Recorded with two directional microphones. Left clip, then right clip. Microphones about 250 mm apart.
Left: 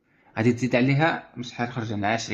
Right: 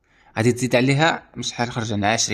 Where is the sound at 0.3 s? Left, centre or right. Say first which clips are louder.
Right 4 dB; right.